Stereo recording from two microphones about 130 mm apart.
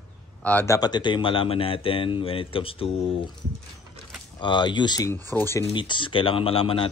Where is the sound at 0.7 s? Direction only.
30° left (ahead or behind).